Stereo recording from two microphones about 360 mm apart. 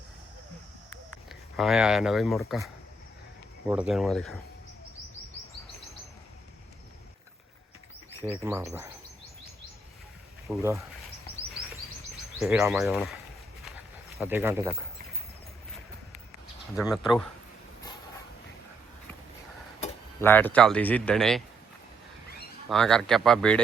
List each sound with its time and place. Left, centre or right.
1.3 s speech: centre
3.7 s speech: centre
8.2 s speech: centre
10.5 s speech: centre
11.3 s chirp: right
12.4 s speech: centre
13.7 s a sound: centre
16.7 s speech: centre
20.2 s speech: centre
22.7 s speech: centre